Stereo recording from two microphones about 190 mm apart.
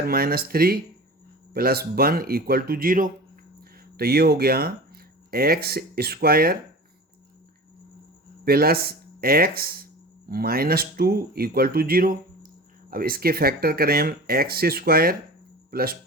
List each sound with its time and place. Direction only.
0.0 s speech: 50° right (ahead or behind)
8.4 s speech: 55° right (ahead or behind)